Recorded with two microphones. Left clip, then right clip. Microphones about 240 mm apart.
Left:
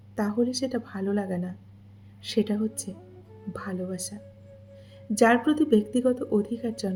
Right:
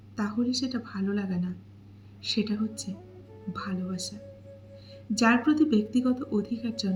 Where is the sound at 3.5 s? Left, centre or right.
Left.